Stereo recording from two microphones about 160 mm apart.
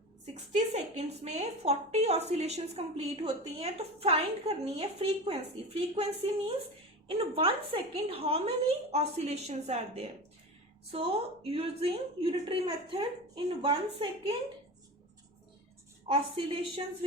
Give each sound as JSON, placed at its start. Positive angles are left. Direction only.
{"t": 0.7, "sound": "a woman's voice", "side_deg": -40}
{"t": 16.0, "sound": "a woman's voice", "side_deg": -35}